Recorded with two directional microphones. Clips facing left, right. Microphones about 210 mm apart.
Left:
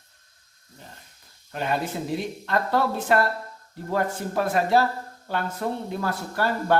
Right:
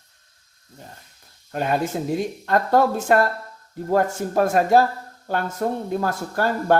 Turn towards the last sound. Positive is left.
turn(degrees=-45)  # may be behind; listen again after turning